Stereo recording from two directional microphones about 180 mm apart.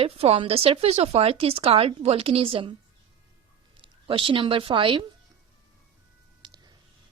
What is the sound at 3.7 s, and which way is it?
Speech, 30° right (ahead or behind).